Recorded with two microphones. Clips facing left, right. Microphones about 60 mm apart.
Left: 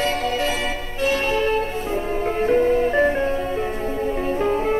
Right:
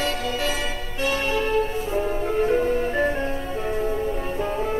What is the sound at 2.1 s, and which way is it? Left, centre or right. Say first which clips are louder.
Music: left 3 dB; left.